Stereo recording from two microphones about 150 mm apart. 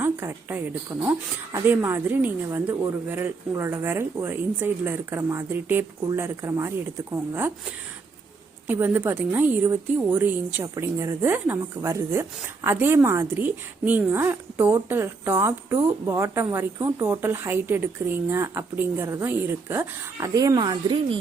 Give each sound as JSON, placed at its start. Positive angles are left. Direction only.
{"t": 0.0, "sound": "a woman's voice", "side_deg": -15}
{"t": 8.6, "sound": "a woman's voice", "side_deg": -10}